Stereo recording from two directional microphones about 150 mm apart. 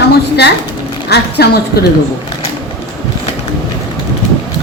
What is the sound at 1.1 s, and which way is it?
Dishes, 90° left.